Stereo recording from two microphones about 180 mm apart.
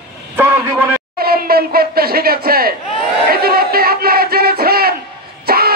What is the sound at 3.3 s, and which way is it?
Music, 55° right (ahead or behind).